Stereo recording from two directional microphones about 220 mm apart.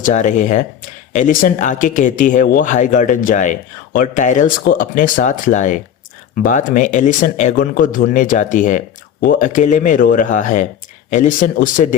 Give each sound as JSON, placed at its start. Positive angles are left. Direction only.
{"t": 0.0, "sound": "speech", "side_deg": 35}